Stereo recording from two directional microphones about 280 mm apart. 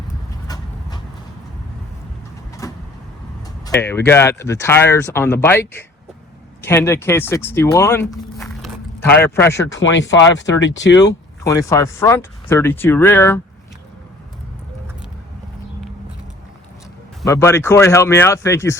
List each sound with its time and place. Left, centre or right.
0.4 s a sound: centre
2.6 s vehicle: centre
3.7 s speech: centre
9.9 s speech: left
10.9 s speech: centre
17.2 s speech: centre